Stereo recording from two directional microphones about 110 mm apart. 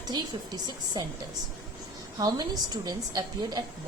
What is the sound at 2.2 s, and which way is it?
A woman's voice, 40° right (ahead or behind).